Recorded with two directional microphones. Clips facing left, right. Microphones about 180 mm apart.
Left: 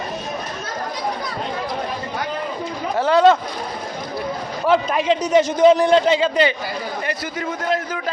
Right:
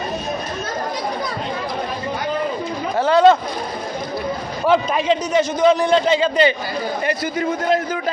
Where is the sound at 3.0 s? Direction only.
20° right (ahead or behind).